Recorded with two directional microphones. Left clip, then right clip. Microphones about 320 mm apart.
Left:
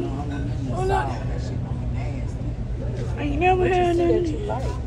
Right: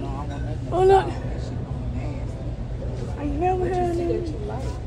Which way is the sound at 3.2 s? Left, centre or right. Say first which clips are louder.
Left 4 dB; centre.